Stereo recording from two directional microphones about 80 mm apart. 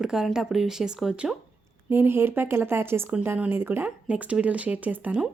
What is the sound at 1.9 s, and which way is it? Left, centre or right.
A woman's voice, right.